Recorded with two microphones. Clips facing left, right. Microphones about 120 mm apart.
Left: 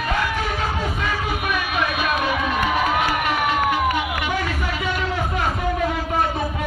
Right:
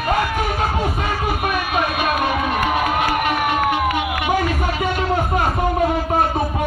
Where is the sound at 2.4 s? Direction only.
50° right (ahead or behind).